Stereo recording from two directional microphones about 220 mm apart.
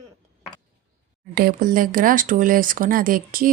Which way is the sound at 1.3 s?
40° right (ahead or behind).